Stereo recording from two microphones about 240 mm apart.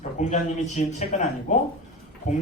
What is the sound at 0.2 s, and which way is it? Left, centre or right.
A man's voice, left.